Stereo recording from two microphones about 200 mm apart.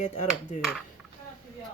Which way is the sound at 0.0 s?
35° left (ahead or behind).